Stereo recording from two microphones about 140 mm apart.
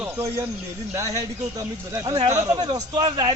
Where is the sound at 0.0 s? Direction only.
15° right (ahead or behind).